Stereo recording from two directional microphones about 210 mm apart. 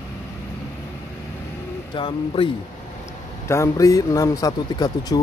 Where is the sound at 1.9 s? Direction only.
25° left (ahead or behind).